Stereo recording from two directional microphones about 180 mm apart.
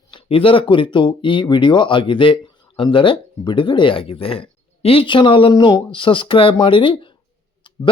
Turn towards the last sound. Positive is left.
turn(degrees=30)  # may be behind; listen again after turning